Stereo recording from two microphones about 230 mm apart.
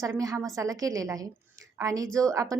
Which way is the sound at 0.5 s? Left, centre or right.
Centre.